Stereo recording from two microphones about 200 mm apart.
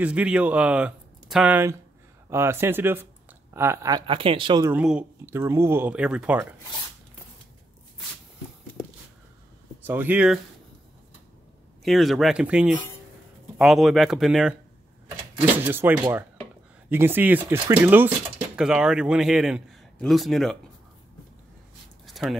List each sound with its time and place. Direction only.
0.0 s speech: 5° right (ahead or behind); by 4.6 s 25° right (ahead or behind)
4.6 s speech: 5° right (ahead or behind)
9.8 s speech: 10° right (ahead or behind)
11.8 s a man's voice: centre (ahead or behind)
22.0 s a sound: centre (ahead or behind)